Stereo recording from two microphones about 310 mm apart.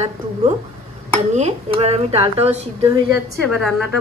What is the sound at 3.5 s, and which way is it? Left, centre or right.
Speech, centre.